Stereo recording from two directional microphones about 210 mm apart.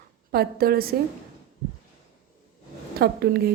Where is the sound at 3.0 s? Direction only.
50° right (ahead or behind).